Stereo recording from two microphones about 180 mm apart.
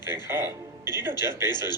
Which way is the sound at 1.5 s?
25° left (ahead or behind).